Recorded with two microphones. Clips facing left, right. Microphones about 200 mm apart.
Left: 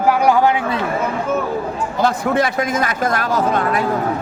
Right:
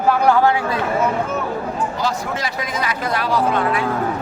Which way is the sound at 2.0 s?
55° left (ahead or behind).